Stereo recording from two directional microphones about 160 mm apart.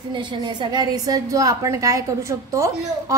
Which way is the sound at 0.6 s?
25° right (ahead or behind).